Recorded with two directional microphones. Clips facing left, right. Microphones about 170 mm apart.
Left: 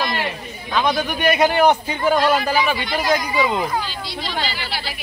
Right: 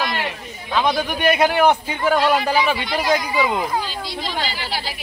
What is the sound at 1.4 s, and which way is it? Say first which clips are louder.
Speech: left 2 dB; 10° right (ahead or behind).